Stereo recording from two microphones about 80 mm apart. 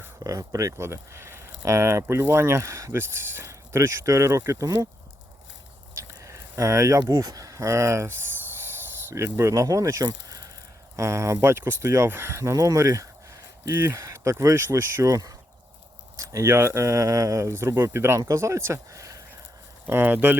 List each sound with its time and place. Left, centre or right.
0.3 s speech: right
3.0 s speech: right
5.9 s speech: right
8.5 s snake: right
10.9 s speech: right
15.1 s speech: right
19.9 s speech: right